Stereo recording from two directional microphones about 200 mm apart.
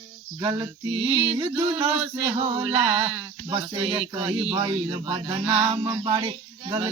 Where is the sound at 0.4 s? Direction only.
20° right (ahead or behind).